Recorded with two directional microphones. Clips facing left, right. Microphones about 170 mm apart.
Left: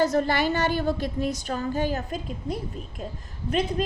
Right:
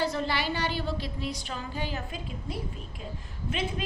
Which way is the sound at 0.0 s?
45° left (ahead or behind).